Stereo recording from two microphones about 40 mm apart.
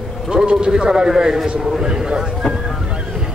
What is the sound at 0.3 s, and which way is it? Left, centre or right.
A man's voice, right.